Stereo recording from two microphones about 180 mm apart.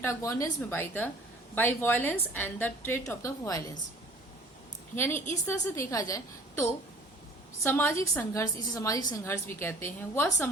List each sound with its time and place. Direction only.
0.0 s a woman's voice: 15° left (ahead or behind)
4.9 s a woman's voice: 10° left (ahead or behind)